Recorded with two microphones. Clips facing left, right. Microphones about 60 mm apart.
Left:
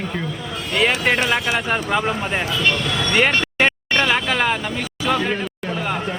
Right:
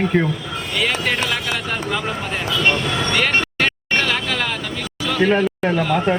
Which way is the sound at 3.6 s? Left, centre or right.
Left.